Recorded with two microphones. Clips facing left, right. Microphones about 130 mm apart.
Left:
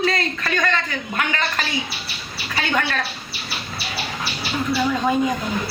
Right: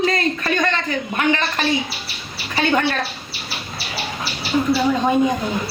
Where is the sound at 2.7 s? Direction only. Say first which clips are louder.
Right 4 dB; 25° right (ahead or behind).